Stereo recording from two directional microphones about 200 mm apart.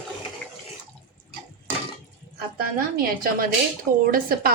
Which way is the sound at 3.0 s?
45° right (ahead or behind).